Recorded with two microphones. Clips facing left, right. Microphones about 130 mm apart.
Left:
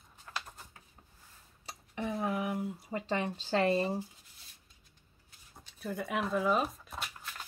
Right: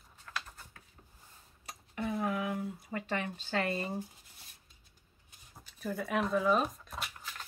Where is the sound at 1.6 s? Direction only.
20° left (ahead or behind).